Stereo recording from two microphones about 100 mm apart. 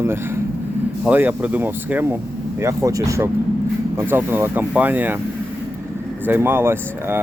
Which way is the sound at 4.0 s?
20° right (ahead or behind).